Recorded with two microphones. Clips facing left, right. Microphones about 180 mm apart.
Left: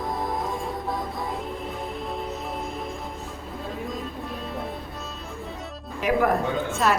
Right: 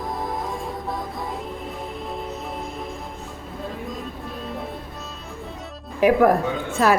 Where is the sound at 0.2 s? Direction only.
Centre (ahead or behind).